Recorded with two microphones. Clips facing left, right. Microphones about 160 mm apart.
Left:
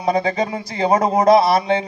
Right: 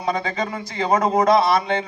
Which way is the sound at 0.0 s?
35° left (ahead or behind).